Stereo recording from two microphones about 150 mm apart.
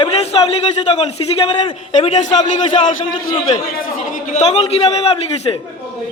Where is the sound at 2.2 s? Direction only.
50° left (ahead or behind).